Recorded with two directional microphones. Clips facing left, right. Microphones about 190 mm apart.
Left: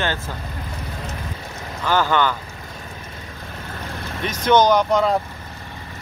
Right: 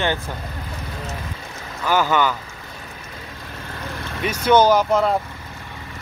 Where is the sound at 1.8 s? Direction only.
10° right (ahead or behind).